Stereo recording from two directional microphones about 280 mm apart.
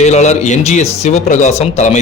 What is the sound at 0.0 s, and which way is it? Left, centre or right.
A man's voice, left.